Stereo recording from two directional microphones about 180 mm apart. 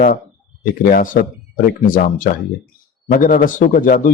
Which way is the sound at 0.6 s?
50° left (ahead or behind).